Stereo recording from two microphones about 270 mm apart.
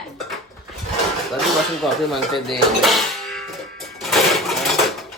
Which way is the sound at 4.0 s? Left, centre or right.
Centre.